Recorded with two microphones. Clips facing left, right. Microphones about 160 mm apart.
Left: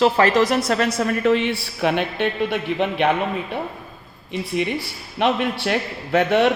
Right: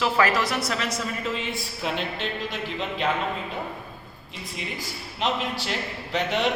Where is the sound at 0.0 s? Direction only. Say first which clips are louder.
Left 7 dB; 40° left (ahead or behind).